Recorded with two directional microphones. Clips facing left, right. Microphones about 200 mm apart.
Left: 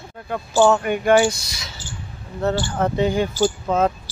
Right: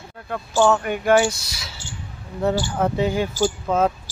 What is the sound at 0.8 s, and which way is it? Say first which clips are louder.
Speech: left 2 dB; centre (ahead or behind).